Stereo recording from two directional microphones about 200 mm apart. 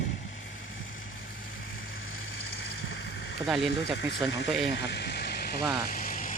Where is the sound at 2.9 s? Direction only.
60° left (ahead or behind).